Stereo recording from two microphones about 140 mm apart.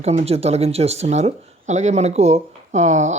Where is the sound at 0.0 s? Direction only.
50° right (ahead or behind).